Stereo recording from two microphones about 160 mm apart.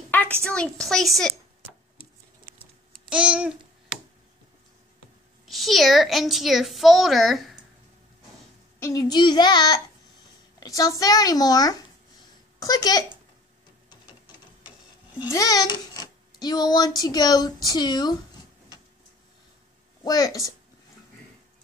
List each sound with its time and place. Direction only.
0.4 s a child's voice: 5° left (ahead or behind)
3.1 s babbling: 5° right (ahead or behind)
5.5 s a child's voice: centre (ahead or behind)
8.7 s a woman's voice: 20° left (ahead or behind)
15.2 s a child's voice: 20° left (ahead or behind)
20.1 s speech: 20° left (ahead or behind)